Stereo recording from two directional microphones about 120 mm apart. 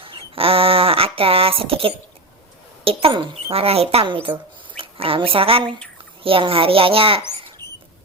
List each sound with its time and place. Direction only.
0.0 s a sound: 50° right (ahead or behind)
2.8 s a child's voice: 45° right (ahead or behind)
7.6 s mouse: 35° right (ahead or behind)